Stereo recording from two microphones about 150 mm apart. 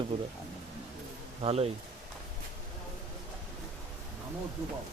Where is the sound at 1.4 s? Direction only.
40° right (ahead or behind).